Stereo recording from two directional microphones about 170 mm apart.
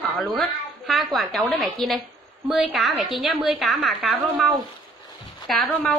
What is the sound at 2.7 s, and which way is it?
A woman's voice, centre (ahead or behind).